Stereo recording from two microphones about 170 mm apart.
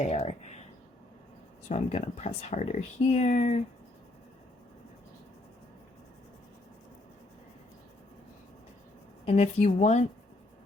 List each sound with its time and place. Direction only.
0.0 s speech: 40° left (ahead or behind)
1.6 s speech: 40° left (ahead or behind)
9.2 s speech: 40° left (ahead or behind)